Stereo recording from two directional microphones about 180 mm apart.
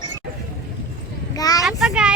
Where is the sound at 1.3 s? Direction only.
20° left (ahead or behind).